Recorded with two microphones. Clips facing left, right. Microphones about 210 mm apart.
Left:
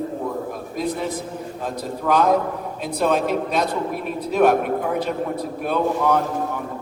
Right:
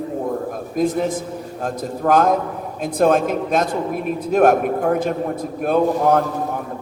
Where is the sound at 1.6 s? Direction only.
50° right (ahead or behind).